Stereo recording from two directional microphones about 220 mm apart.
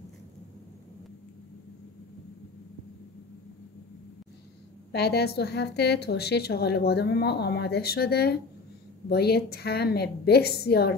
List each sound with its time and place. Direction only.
4.9 s a woman's voice: 50° left (ahead or behind)